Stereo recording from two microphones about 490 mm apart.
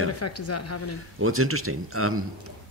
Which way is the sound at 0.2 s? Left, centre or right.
Left.